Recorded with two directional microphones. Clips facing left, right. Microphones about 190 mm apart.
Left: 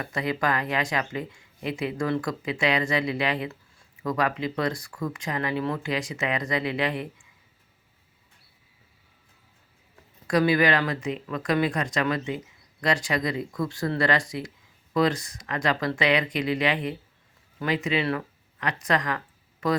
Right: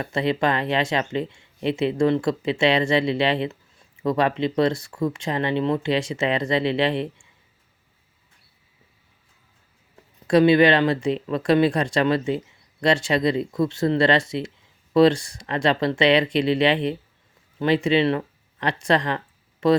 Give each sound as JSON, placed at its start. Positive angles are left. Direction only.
{"t": 0.0, "sound": "speech", "side_deg": -25}
{"t": 10.2, "sound": "speech", "side_deg": -25}